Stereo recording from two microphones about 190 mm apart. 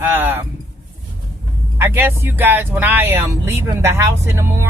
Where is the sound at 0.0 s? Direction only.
10° right (ahead or behind).